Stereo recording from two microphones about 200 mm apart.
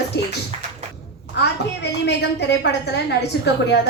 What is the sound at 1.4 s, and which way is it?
A woman's voice, 60° left (ahead or behind).